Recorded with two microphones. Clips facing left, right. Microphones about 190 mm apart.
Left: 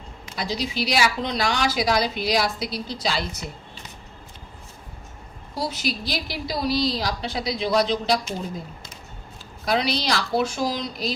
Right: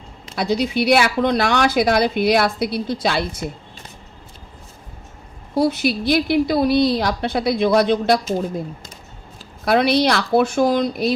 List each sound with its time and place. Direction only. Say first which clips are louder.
0.3 s speech: right 8 dB; 60° right (ahead or behind)
5.5 s speech: right 10 dB; 60° right (ahead or behind)
9.6 s speech: right 8 dB; 60° right (ahead or behind)